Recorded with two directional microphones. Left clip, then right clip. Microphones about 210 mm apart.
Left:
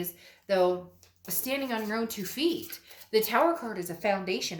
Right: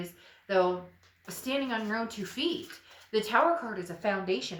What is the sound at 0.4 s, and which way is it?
A woman's voice, 45° left (ahead or behind).